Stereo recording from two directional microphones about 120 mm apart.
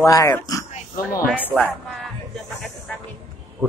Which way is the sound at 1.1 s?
15° left (ahead or behind).